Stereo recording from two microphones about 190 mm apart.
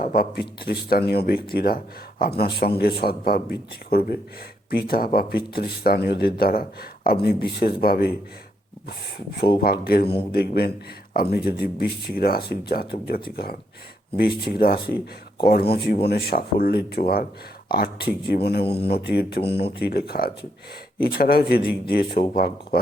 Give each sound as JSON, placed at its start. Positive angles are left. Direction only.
{"t": 0.0, "sound": "speech", "side_deg": 50}
{"t": 18.6, "sound": "speech", "side_deg": 30}
{"t": 18.9, "sound": "speech", "side_deg": 60}